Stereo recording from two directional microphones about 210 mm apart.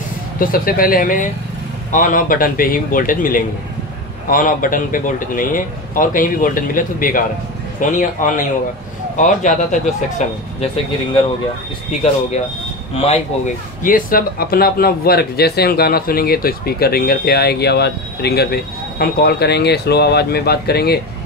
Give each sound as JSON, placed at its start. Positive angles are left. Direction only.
{"t": 0.4, "sound": "speech", "side_deg": 45}
{"t": 12.9, "sound": "speech", "side_deg": 30}